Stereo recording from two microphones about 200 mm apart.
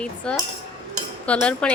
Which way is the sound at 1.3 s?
5° left (ahead or behind).